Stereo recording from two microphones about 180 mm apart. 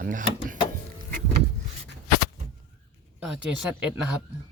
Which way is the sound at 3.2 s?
5° right (ahead or behind).